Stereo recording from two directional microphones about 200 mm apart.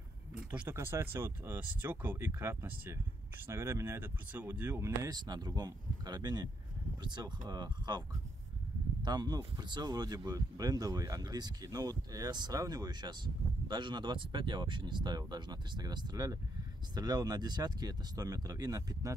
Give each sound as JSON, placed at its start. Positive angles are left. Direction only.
{"t": 0.3, "sound": "speech", "side_deg": -5}
{"t": 9.0, "sound": "speech", "side_deg": -20}